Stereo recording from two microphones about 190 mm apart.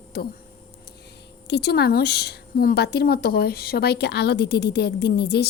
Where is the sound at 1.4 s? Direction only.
60° left (ahead or behind).